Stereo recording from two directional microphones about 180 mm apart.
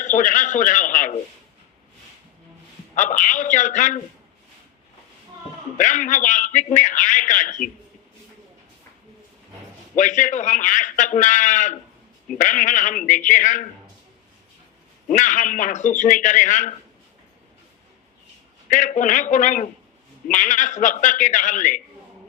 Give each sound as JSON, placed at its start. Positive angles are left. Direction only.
{"t": 0.0, "sound": "a man's voice", "side_deg": 45}
{"t": 2.9, "sound": "a man's voice", "side_deg": 45}
{"t": 5.7, "sound": "a man's voice", "side_deg": 45}
{"t": 9.9, "sound": "a man's voice", "side_deg": 45}
{"t": 15.1, "sound": "a man's voice", "side_deg": 45}
{"t": 18.7, "sound": "a man's voice", "side_deg": 45}